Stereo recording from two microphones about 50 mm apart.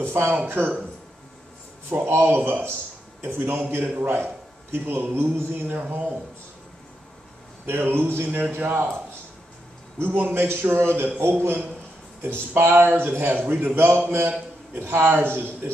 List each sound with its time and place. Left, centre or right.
0.0 s a sound: right
0.5 s a man's voice: right
1.9 s speech: right
2.2 s a man's voice: right
7.6 s a man's voice: right
9.9 s a man's voice: right
12.2 s a man's voice: right